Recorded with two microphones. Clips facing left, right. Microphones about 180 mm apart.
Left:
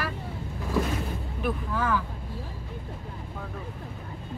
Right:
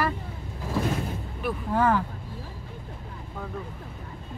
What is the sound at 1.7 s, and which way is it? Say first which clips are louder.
Speech: right 7 dB; 60° right (ahead or behind).